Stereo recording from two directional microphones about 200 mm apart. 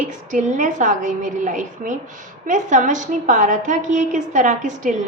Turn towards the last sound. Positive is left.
turn(degrees=-35)  # may be behind; listen again after turning